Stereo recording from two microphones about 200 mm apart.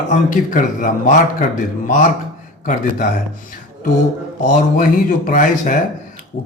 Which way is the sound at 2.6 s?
45° left (ahead or behind).